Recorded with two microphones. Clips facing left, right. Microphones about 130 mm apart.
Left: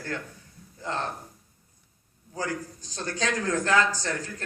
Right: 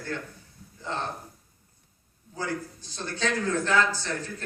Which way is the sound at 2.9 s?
45° left (ahead or behind).